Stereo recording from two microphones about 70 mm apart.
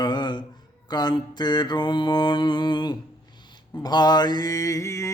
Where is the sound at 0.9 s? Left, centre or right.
Left.